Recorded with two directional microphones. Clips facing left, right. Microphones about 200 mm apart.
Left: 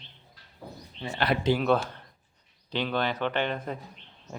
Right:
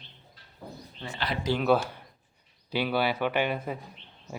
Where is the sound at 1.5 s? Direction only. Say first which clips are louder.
Left 2 dB; 20° left (ahead or behind).